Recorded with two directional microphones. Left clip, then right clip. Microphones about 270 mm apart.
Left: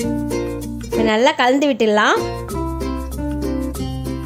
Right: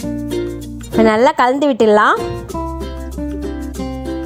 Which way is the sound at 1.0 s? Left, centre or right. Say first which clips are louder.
Right 3 dB; centre.